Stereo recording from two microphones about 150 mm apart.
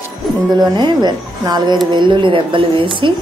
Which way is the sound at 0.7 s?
30° right (ahead or behind).